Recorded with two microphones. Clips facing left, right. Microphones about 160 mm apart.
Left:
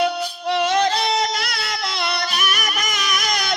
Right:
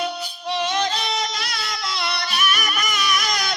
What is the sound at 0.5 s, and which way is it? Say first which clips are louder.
Music: left 5 dB; 55° left (ahead or behind).